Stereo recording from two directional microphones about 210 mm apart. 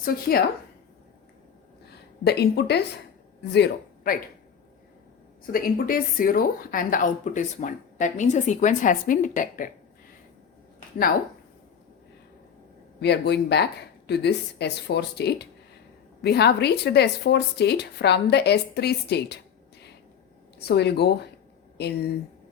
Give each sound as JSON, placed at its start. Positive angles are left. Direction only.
{"t": 0.0, "sound": "a woman's voice", "side_deg": 45}
{"t": 2.2, "sound": "a woman's voice", "side_deg": 50}
{"t": 5.5, "sound": "a woman's voice", "side_deg": 45}
{"t": 13.0, "sound": "a woman's voice", "side_deg": 50}
{"t": 20.6, "sound": "a woman's voice", "side_deg": 50}